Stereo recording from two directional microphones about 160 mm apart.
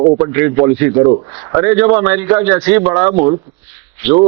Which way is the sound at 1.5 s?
20° right (ahead or behind).